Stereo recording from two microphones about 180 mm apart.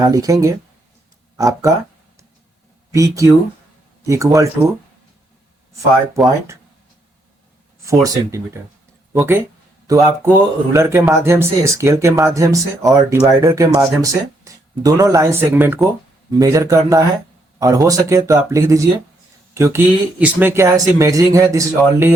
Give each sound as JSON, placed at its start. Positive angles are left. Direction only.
{"t": 0.0, "sound": "speech", "side_deg": -20}
{"t": 2.9, "sound": "speech", "side_deg": -15}
{"t": 7.9, "sound": "speech", "side_deg": -20}